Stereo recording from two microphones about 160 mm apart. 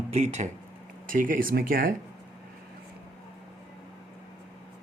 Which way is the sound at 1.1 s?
60° right (ahead or behind).